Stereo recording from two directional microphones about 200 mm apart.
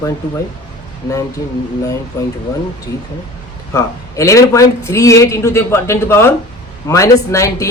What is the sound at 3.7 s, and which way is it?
Speech, 15° left (ahead or behind).